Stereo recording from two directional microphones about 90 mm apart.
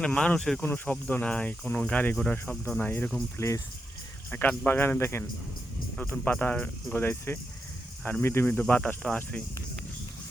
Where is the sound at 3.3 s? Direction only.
30° left (ahead or behind).